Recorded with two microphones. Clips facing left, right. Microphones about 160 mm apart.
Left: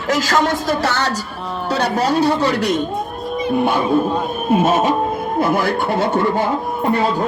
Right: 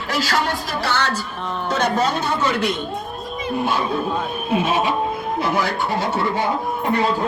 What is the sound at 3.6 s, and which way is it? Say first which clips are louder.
Speech: left 3 dB; 55° left (ahead or behind).